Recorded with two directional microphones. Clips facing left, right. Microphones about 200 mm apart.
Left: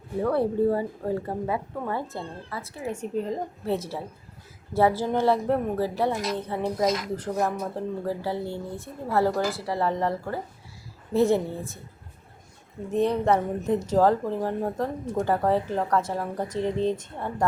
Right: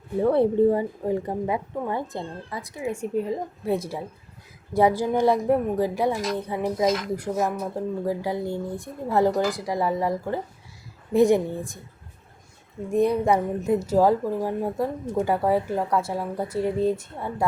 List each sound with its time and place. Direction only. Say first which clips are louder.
0.2 s a woman's voice: right 4 dB; 25° right (ahead or behind)
12.9 s a woman's voice: right 2 dB; 10° right (ahead or behind)